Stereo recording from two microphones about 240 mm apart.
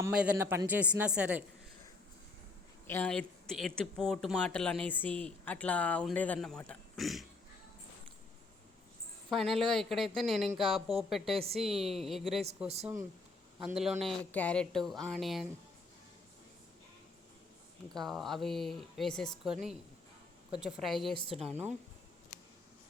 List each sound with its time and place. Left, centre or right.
0.0 s a man's voice: centre
2.8 s speech: centre
9.3 s speech: centre
12.6 s speech: right
13.6 s speech: centre
17.9 s speech: centre